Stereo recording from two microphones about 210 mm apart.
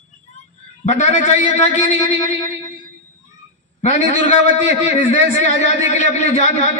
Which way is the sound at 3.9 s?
60° right (ahead or behind).